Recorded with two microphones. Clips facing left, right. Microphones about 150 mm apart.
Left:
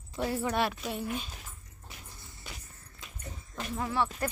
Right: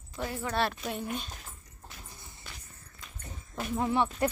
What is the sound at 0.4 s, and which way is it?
Speech, 15° left (ahead or behind).